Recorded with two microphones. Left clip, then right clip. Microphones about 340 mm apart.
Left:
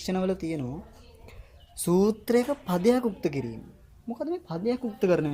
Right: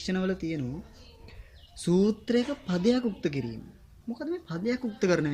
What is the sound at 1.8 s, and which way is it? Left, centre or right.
Speech, centre.